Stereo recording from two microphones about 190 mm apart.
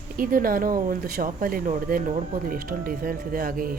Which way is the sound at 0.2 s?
50° right (ahead or behind).